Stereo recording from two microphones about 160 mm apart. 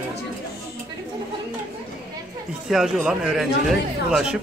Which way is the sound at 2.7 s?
5° right (ahead or behind).